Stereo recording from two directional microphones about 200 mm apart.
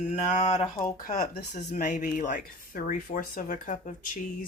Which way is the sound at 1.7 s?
40° left (ahead or behind).